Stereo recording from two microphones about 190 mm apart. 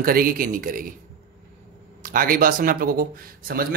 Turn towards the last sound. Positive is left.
turn(degrees=-50)  # may be behind; listen again after turning